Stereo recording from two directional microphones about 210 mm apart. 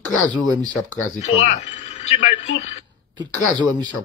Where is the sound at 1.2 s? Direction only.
35° left (ahead or behind).